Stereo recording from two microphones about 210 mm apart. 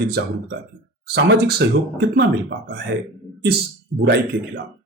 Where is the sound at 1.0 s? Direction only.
50° right (ahead or behind).